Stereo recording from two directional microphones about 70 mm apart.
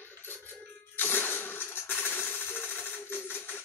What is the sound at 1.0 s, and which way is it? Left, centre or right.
Coin, left.